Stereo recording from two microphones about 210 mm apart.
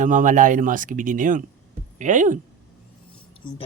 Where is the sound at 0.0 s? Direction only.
35° right (ahead or behind).